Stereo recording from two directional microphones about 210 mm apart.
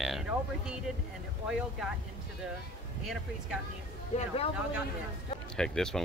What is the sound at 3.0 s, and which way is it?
Speech, centre (ahead or behind).